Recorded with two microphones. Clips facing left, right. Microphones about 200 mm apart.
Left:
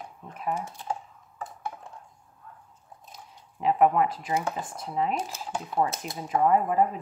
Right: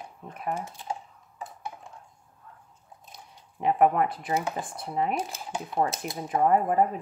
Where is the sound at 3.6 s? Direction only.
50° right (ahead or behind).